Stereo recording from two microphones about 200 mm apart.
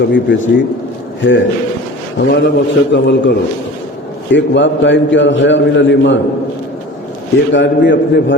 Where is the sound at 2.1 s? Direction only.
60° left (ahead or behind).